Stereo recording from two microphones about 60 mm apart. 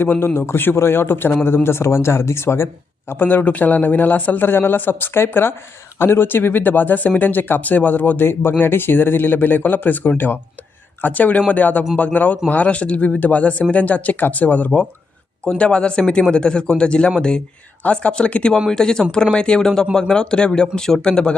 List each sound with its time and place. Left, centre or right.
0.2 s speech: left
3.1 s speech: left; by 21.3 s centre